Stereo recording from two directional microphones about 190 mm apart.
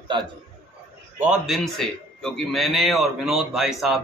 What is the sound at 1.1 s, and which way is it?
A man's voice, 5° right (ahead or behind).